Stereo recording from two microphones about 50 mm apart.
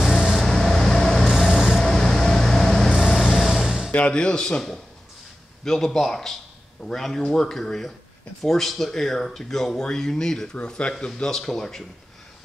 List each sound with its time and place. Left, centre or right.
0.0 s vehicle: centre
1.3 s vehicle: centre
1.8 s vehicle: centre
3.3 s vehicle: centre
3.9 s speech: left
10.5 s speech: left